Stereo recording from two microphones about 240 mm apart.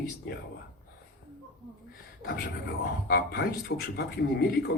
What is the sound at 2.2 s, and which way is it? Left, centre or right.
Speech, left.